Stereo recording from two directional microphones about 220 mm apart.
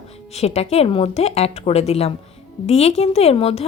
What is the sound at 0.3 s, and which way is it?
Speech, 30° left (ahead or behind).